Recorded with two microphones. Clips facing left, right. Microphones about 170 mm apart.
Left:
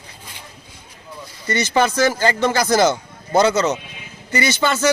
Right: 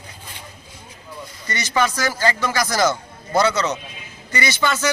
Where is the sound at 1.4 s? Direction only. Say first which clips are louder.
Left 4 dB; 30° left (ahead or behind).